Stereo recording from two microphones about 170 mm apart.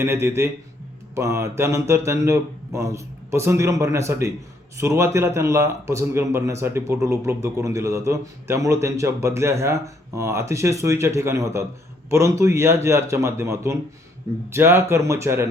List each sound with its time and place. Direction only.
0.0 s a man's voice: 15° right (ahead or behind)